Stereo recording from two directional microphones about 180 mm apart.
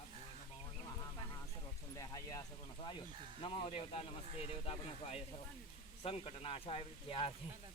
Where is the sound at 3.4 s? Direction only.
30° left (ahead or behind).